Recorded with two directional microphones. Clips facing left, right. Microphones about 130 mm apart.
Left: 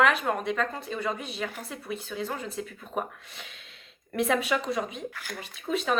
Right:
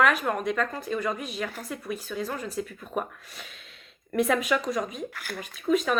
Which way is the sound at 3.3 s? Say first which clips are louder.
Right 1 dB; 25° left (ahead or behind).